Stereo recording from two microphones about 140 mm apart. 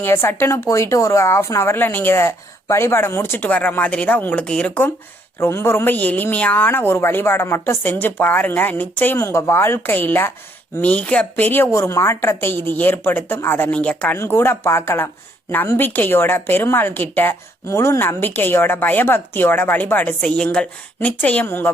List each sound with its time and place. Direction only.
0.0 s speech: 15° left (ahead or behind)